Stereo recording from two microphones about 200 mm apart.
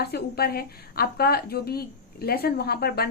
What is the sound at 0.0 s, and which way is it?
A woman's voice, 50° left (ahead or behind).